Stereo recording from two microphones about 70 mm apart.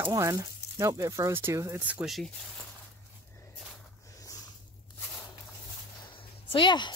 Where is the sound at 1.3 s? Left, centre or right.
Right.